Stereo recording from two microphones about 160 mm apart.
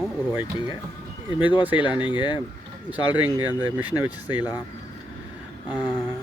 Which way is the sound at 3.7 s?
10° right (ahead or behind).